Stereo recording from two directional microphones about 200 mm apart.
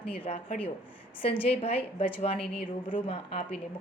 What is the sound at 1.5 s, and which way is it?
A woman's voice, 30° left (ahead or behind).